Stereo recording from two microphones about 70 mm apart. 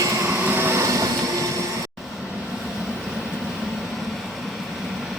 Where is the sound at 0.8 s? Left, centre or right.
Right.